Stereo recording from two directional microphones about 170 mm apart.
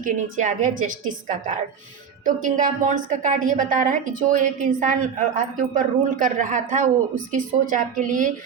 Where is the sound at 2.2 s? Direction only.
50° right (ahead or behind).